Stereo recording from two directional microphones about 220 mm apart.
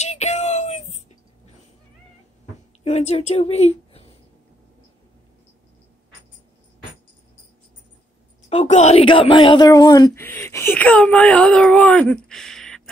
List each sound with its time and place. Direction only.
0.0 s a sound: 30° left (ahead or behind)
2.8 s a woman's voice: 30° left (ahead or behind)
8.5 s speech: 30° left (ahead or behind); by 12.8 s 5° left (ahead or behind)